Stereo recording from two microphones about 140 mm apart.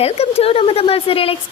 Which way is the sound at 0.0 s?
45° left (ahead or behind).